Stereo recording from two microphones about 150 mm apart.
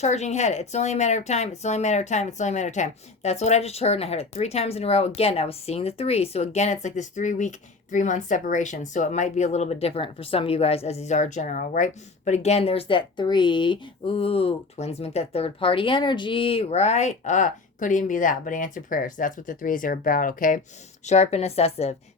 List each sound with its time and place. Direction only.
0.0 s speech: 50° left (ahead or behind); by 20.6 s 65° left (ahead or behind)
21.1 s speech: 45° left (ahead or behind)